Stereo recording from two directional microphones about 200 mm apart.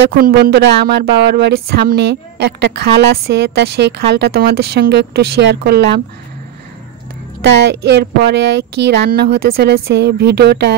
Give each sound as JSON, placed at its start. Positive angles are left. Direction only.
{"t": 0.1, "sound": "speech", "side_deg": -50}
{"t": 7.4, "sound": "speech", "side_deg": -60}